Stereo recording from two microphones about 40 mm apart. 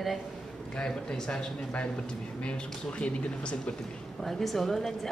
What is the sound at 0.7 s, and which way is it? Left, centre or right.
Speech, centre.